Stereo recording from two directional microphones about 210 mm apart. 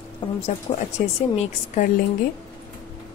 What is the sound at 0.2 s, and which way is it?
Speech, 20° left (ahead or behind).